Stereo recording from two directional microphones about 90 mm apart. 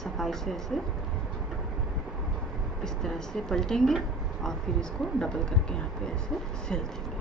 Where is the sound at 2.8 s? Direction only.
5° left (ahead or behind).